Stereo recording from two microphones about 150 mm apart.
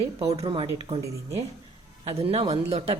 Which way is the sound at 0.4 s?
35° right (ahead or behind).